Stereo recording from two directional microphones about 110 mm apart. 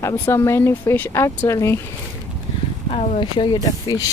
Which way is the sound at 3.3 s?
40° left (ahead or behind).